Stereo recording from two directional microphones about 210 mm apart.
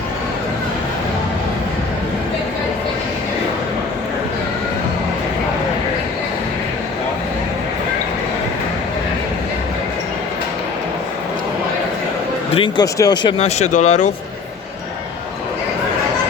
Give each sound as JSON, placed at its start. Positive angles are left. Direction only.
{"t": 12.5, "sound": "speech", "side_deg": 20}
{"t": 13.4, "sound": "speech", "side_deg": 35}